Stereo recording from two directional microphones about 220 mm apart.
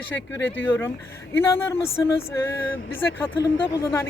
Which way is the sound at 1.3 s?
10° left (ahead or behind).